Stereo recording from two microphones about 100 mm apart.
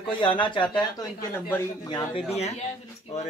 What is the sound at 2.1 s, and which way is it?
Speech, 90° left.